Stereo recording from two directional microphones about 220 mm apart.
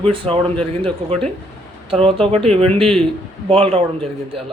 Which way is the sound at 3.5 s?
25° right (ahead or behind).